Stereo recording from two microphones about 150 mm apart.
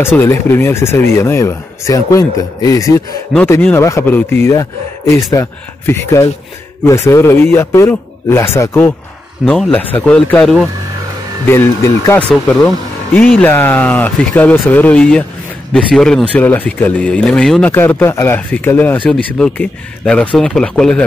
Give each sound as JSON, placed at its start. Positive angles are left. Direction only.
{"t": 0.0, "sound": "speech", "side_deg": 15}
{"t": 11.4, "sound": "speech", "side_deg": 15}